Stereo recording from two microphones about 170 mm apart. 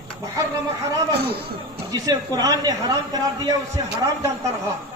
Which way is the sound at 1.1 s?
70° right (ahead or behind).